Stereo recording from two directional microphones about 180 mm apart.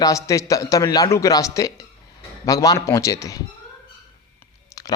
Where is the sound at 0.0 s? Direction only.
20° left (ahead or behind).